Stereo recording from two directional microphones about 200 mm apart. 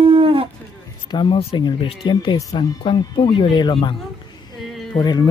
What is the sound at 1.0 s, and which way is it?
Speech, 25° left (ahead or behind).